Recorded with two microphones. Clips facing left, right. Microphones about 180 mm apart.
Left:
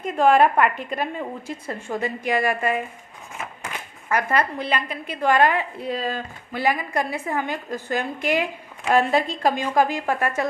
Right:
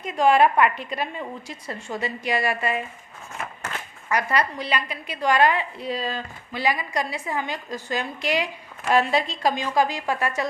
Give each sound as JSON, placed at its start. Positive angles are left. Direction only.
{"t": 0.0, "sound": "a woman's voice", "side_deg": 50}
{"t": 3.3, "sound": "a sound", "side_deg": 10}
{"t": 4.1, "sound": "a woman's voice", "side_deg": 55}